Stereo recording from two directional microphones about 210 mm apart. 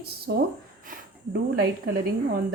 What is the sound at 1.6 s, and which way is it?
Speech, 50° right (ahead or behind).